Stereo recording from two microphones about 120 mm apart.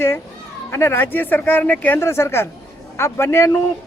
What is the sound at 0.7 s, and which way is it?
Speech, 20° left (ahead or behind).